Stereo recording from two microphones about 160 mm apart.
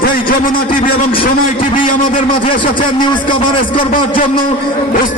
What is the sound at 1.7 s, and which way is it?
Speech, 55° left (ahead or behind).